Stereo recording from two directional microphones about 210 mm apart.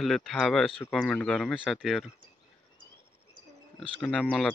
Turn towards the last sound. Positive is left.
turn(degrees=5)  # may be behind; listen again after turning